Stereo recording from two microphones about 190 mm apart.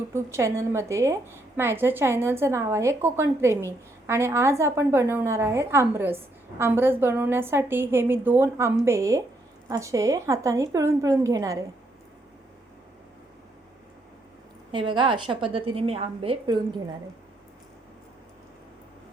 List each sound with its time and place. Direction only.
0.1 s a woman's voice: 15° right (ahead or behind)
14.7 s a woman's voice: 25° right (ahead or behind)